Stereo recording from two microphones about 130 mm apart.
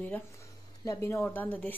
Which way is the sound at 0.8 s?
25° left (ahead or behind).